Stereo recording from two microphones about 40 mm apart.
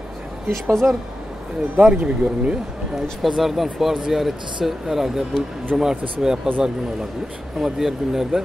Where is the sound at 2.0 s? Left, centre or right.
Right.